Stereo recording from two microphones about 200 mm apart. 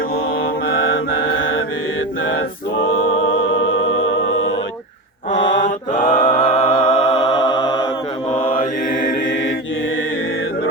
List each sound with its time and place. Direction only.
0.7 s mantra: 75° left (ahead or behind)
3.2 s music: 70° left (ahead or behind)
5.3 s mantra: 35° left (ahead or behind)
6.4 s music: 25° left (ahead or behind)
9.2 s chant: 65° left (ahead or behind)